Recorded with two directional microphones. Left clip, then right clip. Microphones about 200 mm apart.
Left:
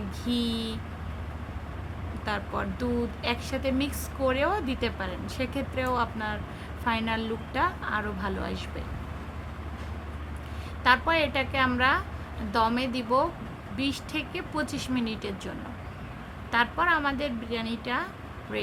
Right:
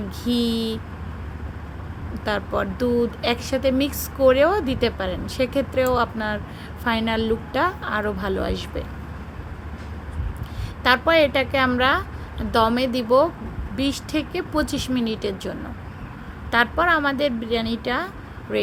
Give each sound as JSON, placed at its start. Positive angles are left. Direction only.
{"t": 0.3, "sound": "speech", "side_deg": -20}
{"t": 2.2, "sound": "speech", "side_deg": -20}
{"t": 10.8, "sound": "speech", "side_deg": -20}